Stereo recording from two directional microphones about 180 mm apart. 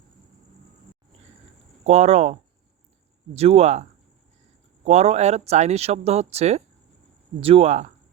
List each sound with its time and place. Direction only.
1.8 s speech: 40° right (ahead or behind)